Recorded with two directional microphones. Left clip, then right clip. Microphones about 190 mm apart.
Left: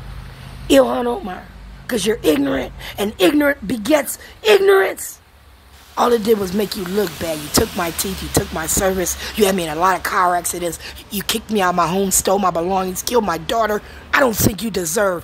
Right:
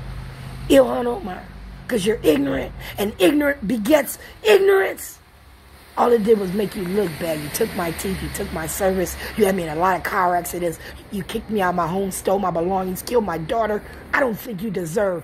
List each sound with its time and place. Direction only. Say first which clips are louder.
0.7 s a woman's voice: left 2 dB; 20° left (ahead or behind)
5.9 s speech: left 1 dB; 20° left (ahead or behind)
11.1 s a woman's voice: left 5 dB; 30° left (ahead or behind)
14.5 s speech: left 3 dB; 30° left (ahead or behind)